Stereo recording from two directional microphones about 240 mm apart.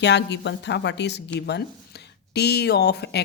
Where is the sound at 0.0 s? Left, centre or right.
Left.